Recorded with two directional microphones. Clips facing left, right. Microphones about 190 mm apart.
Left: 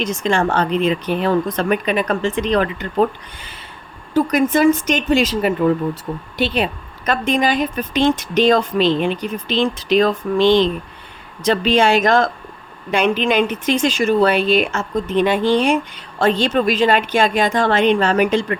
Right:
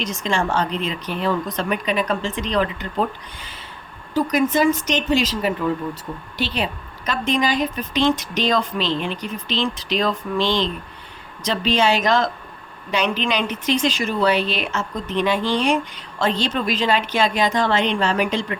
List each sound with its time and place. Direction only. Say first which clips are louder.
0.0 s speech: left 5 dB; 50° left (ahead or behind)
4.1 s speech: left 3 dB; 55° left (ahead or behind)